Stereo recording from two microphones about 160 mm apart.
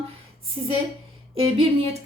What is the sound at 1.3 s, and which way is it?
Speech, 40° right (ahead or behind).